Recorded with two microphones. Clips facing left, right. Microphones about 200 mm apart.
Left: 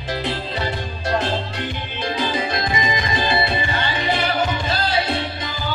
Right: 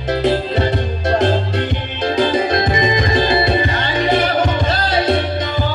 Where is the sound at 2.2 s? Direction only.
50° right (ahead or behind).